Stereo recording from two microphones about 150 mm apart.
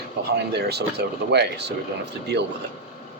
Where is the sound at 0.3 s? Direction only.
90° right.